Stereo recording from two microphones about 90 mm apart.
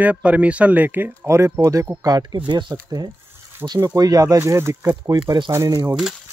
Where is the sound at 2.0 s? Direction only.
50° right (ahead or behind).